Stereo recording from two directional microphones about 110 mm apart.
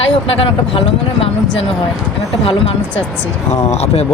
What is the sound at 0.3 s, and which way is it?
Speech, 55° left (ahead or behind).